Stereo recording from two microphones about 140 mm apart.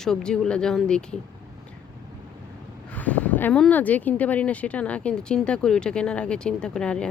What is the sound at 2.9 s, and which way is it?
Speech, 10° left (ahead or behind).